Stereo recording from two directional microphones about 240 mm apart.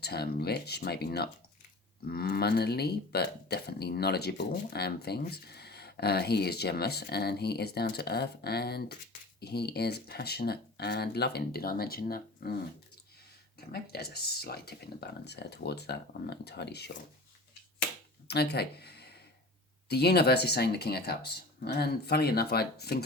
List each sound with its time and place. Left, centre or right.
0.0 s speech: left
13.7 s speech: left
18.3 s speech: left